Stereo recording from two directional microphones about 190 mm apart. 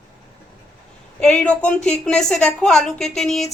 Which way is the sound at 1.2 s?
5° left (ahead or behind).